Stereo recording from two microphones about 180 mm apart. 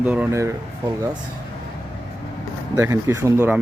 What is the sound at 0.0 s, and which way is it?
Speech, 10° right (ahead or behind).